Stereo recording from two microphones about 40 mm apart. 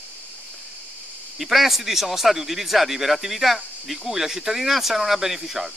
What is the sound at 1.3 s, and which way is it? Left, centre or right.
Speech, centre.